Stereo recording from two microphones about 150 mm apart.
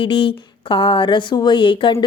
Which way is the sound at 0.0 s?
35° left (ahead or behind).